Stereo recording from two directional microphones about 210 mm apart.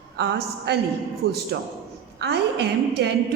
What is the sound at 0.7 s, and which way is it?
Speech, 50° right (ahead or behind).